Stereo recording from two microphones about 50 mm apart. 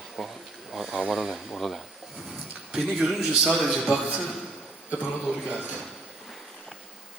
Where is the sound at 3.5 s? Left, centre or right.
Centre.